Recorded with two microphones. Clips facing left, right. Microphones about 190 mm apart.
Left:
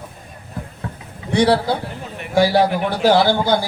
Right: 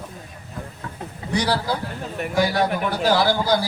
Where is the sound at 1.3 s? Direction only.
25° left (ahead or behind).